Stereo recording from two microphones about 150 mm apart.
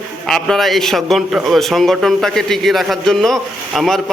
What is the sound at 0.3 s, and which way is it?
A man's voice, 5° left (ahead or behind).